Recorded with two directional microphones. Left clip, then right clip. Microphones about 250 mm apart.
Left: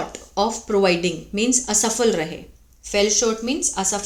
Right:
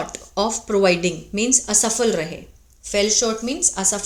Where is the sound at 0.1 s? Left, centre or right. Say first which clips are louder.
Even; centre.